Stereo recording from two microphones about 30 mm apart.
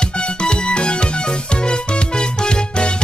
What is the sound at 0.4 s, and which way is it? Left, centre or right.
Music, left.